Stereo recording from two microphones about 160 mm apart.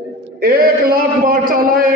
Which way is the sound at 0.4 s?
65° right (ahead or behind).